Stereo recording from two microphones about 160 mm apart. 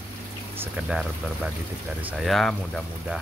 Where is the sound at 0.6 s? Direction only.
5° right (ahead or behind).